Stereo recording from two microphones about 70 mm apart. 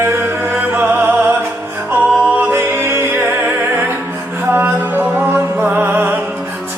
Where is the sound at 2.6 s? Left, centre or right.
Right.